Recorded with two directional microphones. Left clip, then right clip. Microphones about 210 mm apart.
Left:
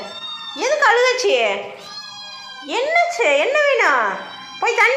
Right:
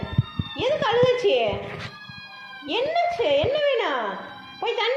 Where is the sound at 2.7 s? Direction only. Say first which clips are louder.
Left 5 dB; 35° left (ahead or behind).